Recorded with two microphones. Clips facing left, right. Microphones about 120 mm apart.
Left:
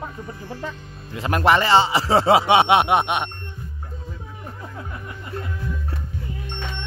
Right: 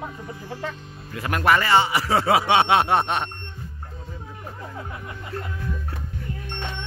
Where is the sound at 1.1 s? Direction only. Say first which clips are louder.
Left 2 dB; 25° left (ahead or behind).